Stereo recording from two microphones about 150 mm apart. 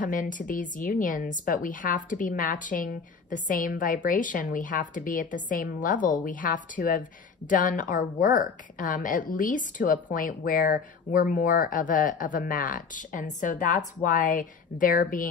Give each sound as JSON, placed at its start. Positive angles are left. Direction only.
{"t": 0.0, "sound": "a woman's voice", "side_deg": 60}